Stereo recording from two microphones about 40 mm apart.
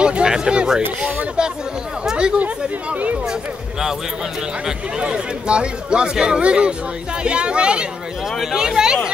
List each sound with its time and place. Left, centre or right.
0.0 s speech: right
2.0 s chatter: centre
2.3 s speech: right
5.0 s speech: right
8.4 s speech: centre